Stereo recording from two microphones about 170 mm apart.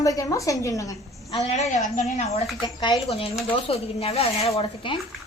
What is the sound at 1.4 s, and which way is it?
Speech, 40° left (ahead or behind).